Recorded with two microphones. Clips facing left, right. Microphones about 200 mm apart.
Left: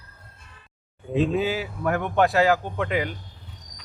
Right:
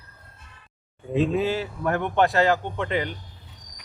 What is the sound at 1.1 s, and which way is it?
Speech, centre (ahead or behind).